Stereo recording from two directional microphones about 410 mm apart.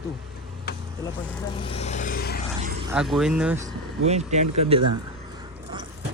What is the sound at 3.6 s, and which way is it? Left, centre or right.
Speech, centre.